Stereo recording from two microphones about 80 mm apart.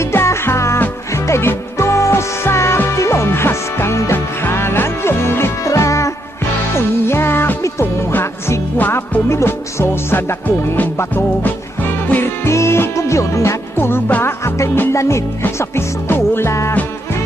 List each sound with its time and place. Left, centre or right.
0.0 s music: left